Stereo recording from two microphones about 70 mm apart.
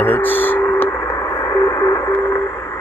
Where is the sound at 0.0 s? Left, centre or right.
Left.